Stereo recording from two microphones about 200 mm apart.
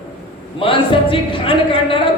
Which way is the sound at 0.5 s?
25° left (ahead or behind).